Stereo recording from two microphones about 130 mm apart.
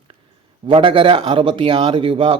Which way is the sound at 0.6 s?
40° right (ahead or behind).